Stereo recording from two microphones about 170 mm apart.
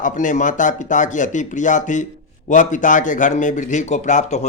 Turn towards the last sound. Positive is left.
turn(degrees=45)  # may be behind; listen again after turning